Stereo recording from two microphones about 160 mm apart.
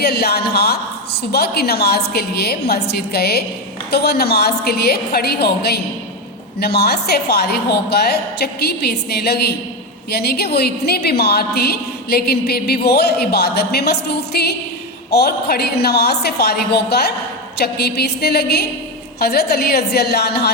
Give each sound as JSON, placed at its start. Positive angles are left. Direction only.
{"t": 0.0, "sound": "a woman's voice", "side_deg": 80}
{"t": 19.2, "sound": "a woman's voice", "side_deg": 80}